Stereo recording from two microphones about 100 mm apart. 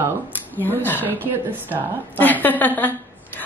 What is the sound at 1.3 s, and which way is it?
Speech, 20° right (ahead or behind).